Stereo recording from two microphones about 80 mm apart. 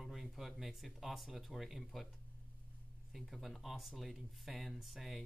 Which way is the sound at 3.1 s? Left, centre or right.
Centre.